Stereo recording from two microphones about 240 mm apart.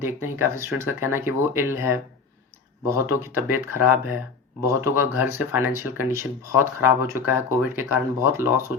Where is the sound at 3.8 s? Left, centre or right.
Centre.